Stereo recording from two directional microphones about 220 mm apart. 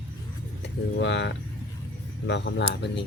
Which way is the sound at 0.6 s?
55° left (ahead or behind).